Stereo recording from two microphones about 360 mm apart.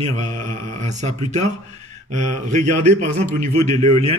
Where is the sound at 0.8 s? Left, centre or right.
Centre.